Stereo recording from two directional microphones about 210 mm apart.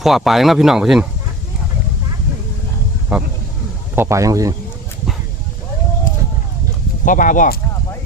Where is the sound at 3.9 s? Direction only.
10° right (ahead or behind).